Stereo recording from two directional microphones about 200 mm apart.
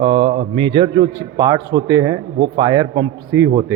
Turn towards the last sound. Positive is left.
turn(degrees=-15)  # may be behind; listen again after turning